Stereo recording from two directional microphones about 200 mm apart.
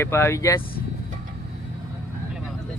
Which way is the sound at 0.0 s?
15° left (ahead or behind).